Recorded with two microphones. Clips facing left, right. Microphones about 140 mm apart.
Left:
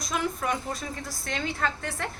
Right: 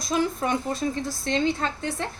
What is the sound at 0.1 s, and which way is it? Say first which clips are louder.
A woman's voice: right 5 dB; 30° right (ahead or behind).